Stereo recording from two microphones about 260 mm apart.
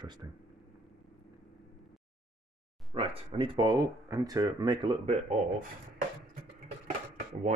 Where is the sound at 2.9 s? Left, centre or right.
Right.